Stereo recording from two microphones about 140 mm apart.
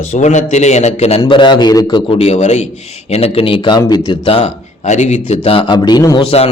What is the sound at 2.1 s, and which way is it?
A man's voice, 50° left (ahead or behind).